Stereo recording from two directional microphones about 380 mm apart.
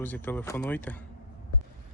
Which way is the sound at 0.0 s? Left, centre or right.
Centre.